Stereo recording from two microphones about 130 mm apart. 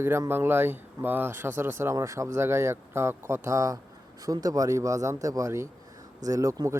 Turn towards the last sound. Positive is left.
turn(degrees=-25)  # may be behind; listen again after turning